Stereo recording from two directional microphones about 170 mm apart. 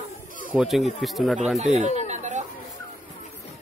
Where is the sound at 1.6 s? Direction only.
40° right (ahead or behind).